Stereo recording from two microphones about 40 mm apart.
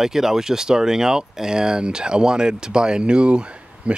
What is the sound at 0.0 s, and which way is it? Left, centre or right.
Speech, centre.